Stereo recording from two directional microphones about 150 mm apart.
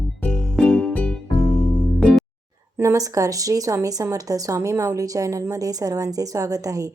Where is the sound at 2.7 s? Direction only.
20° right (ahead or behind).